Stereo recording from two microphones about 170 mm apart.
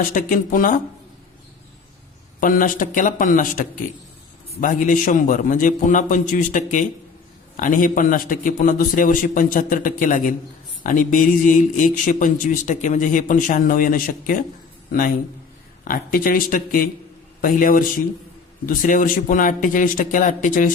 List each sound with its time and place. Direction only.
0.0 s speech: 50° left (ahead or behind)
2.4 s speech: 55° left (ahead or behind)
15.8 s speech: 55° left (ahead or behind)